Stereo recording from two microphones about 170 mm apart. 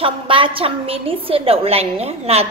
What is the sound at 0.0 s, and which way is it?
A woman's voice, 30° right (ahead or behind).